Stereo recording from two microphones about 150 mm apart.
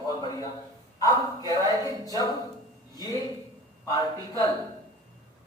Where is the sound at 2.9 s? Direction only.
25° left (ahead or behind).